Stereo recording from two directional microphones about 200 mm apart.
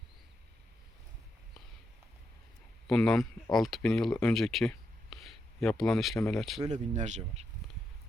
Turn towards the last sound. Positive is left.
turn(degrees=-35)  # may be behind; listen again after turning